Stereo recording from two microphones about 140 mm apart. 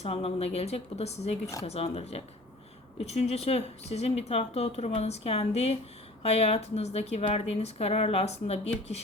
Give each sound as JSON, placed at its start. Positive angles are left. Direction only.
{"t": 0.0, "sound": "speech", "side_deg": 45}